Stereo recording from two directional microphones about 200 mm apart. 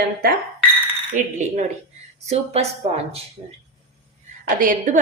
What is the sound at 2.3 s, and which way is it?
Speech, 30° right (ahead or behind).